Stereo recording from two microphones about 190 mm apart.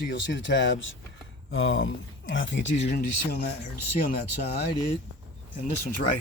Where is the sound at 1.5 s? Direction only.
90° left; by 2.8 s 75° left (ahead or behind).